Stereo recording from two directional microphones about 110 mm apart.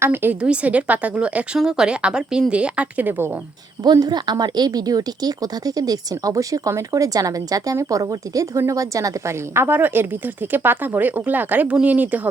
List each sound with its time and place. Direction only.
0.0 s a woman's voice: 20° right (ahead or behind)
3.8 s speech: 40° right (ahead or behind); by 12.3 s 15° right (ahead or behind)